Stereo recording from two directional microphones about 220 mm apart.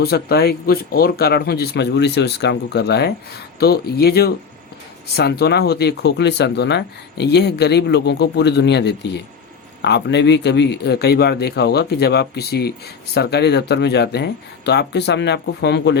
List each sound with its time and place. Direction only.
0.0 s speech: 45° left (ahead or behind)